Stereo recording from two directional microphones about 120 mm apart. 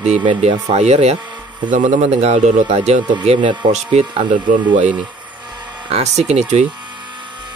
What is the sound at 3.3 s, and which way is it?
Speech, 45° right (ahead or behind).